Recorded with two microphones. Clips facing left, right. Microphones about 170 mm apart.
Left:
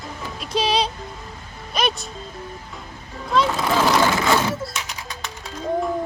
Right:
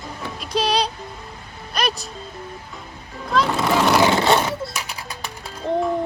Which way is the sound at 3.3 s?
Centre (ahead or behind).